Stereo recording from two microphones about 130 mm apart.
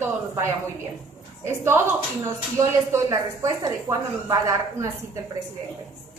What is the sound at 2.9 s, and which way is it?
Speech, 25° right (ahead or behind).